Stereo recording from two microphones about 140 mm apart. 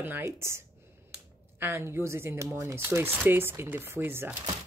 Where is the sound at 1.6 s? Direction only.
15° right (ahead or behind).